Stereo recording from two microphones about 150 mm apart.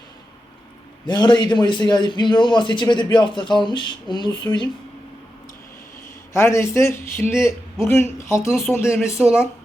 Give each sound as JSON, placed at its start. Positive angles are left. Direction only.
{"t": 1.0, "sound": "a man's voice", "side_deg": 30}
{"t": 6.3, "sound": "a man's voice", "side_deg": 20}
{"t": 8.9, "sound": "speech", "side_deg": 0}